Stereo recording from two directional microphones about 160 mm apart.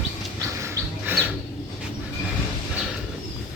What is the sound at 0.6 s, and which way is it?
Bird, 15° right (ahead or behind).